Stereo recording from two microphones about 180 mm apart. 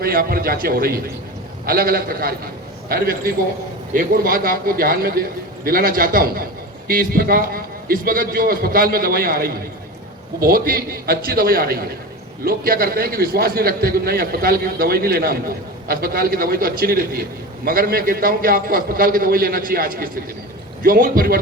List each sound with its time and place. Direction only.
0.0 s a man's voice: 55° right (ahead or behind)